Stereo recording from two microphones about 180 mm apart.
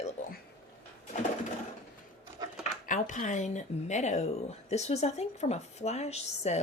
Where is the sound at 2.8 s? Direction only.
45° left (ahead or behind).